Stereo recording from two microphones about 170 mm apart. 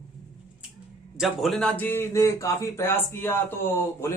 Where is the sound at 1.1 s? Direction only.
Centre (ahead or behind).